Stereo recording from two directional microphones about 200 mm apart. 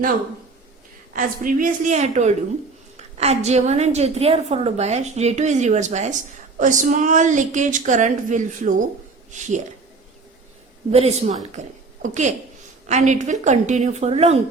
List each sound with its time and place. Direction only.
1.1 s a woman's voice: 45° right (ahead or behind)
10.9 s a woman's voice: 35° right (ahead or behind)